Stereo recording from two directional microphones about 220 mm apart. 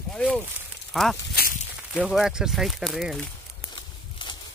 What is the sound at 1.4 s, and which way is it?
Walk, 45° left (ahead or behind).